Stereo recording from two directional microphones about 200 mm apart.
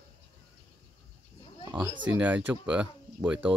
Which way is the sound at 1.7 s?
25° right (ahead or behind).